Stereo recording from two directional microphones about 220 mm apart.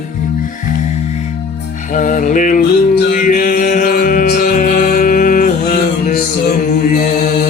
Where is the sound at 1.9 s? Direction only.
35° left (ahead or behind).